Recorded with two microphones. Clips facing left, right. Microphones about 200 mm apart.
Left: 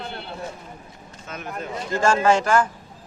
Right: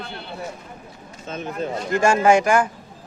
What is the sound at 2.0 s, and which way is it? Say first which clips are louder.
Speech: right 2 dB; 15° right (ahead or behind).